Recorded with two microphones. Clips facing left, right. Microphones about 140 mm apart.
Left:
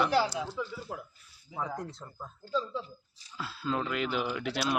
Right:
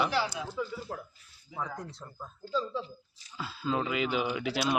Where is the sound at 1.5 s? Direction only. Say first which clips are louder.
Left 1 dB; 30° left (ahead or behind).